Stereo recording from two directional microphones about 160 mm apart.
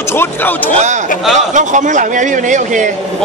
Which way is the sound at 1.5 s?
50° right (ahead or behind).